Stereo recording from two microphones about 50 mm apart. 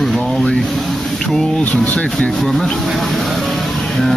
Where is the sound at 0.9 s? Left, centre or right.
Centre.